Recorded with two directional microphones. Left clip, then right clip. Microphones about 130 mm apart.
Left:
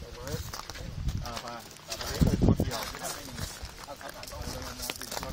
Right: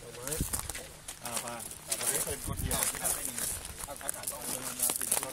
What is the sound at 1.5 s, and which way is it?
Bird, centre (ahead or behind).